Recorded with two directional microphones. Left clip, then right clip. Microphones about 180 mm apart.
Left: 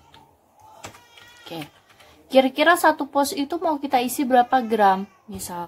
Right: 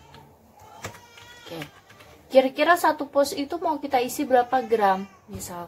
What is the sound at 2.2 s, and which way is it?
A woman's voice, 50° left (ahead or behind).